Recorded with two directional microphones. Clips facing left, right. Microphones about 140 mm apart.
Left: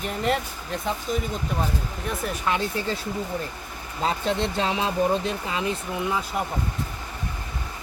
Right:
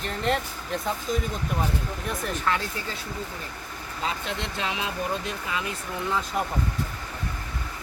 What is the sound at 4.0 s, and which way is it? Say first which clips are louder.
Speech: left 7 dB; 35° left (ahead or behind).